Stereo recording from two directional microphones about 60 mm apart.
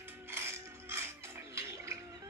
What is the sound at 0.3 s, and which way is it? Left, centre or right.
Music, right.